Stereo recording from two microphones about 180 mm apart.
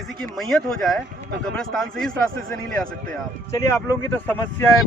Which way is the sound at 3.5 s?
15° left (ahead or behind).